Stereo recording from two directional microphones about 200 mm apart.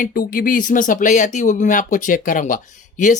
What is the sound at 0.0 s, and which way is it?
Speech, 45° left (ahead or behind).